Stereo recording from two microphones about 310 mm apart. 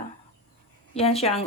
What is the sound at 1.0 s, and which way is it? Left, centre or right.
Speech, centre.